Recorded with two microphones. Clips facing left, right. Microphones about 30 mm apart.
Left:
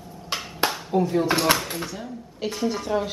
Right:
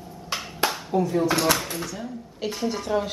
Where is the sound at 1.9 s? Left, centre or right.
Centre.